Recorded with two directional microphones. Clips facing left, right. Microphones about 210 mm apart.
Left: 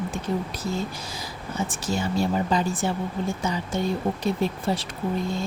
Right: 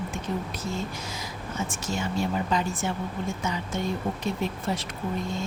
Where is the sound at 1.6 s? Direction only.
35° left (ahead or behind).